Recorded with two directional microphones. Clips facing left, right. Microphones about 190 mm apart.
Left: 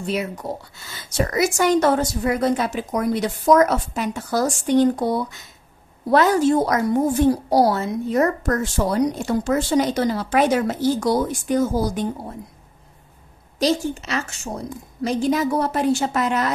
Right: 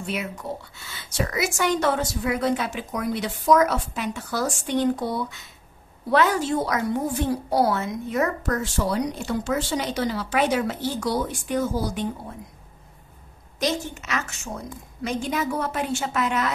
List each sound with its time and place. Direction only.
0.0 s a woman's voice: 35° left (ahead or behind)
13.6 s a woman's voice: 35° left (ahead or behind)